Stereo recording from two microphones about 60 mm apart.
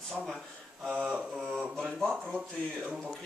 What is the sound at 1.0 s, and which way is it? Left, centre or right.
Mantra, centre.